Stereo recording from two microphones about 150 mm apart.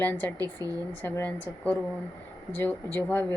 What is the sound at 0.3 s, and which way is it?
Speech, 25° right (ahead or behind).